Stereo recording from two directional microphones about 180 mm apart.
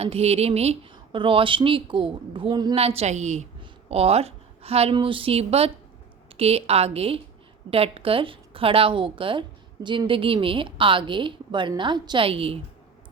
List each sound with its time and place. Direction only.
0.0 s a woman's voice: 35° right (ahead or behind)